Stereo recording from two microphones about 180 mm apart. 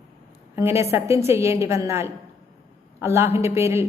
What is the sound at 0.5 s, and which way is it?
A woman's voice, 15° right (ahead or behind).